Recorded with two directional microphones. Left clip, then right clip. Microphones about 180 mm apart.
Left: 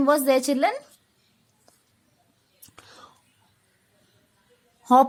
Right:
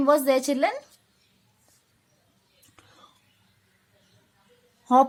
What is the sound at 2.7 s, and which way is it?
Whispering, 40° left (ahead or behind).